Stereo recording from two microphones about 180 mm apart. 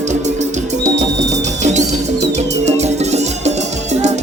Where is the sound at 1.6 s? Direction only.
40° right (ahead or behind).